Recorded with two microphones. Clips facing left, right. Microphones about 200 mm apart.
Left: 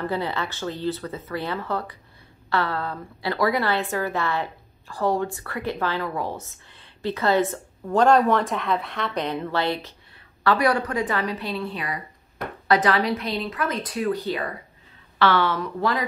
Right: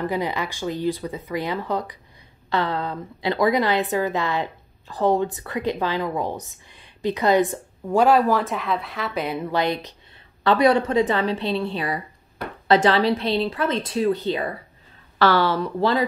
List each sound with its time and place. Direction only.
0.0 s a woman's voice: 15° right (ahead or behind)
15.1 s speech: 40° right (ahead or behind)